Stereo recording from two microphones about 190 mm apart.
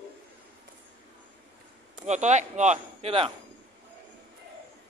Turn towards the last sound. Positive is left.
turn(degrees=-30)  # may be behind; listen again after turning